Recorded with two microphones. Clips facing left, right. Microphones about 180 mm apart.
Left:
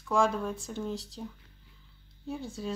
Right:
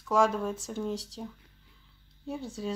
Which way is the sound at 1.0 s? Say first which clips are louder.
Right 1 dB; 40° right (ahead or behind).